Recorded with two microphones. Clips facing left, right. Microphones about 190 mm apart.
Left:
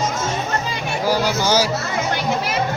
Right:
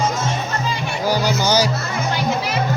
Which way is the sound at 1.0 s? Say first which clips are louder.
Even; 5° left (ahead or behind).